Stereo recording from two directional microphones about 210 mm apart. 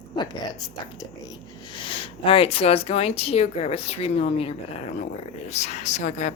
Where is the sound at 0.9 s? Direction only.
20° left (ahead or behind).